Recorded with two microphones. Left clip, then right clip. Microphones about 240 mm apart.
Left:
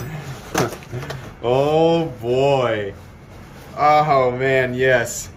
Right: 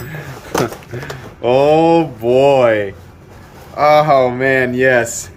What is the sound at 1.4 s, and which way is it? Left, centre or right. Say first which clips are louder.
Speech: right 5 dB; centre.